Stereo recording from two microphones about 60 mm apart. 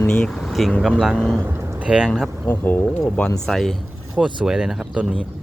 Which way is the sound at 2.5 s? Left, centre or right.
Left.